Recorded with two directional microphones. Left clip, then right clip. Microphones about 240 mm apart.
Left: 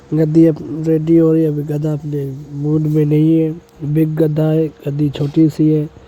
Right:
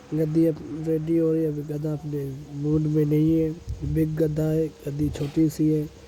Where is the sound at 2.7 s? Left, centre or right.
Centre.